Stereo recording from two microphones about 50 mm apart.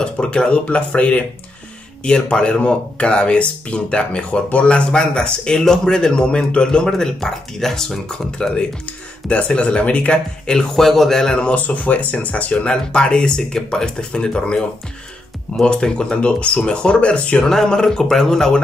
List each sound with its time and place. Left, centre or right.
0.0 s speech: left
5.6 s speech: centre
8.8 s speech: left
10.4 s speech: centre
11.3 s speech: left
17.5 s speech: centre